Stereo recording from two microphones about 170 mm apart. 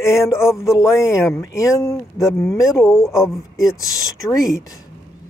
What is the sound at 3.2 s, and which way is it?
Speech, centre (ahead or behind).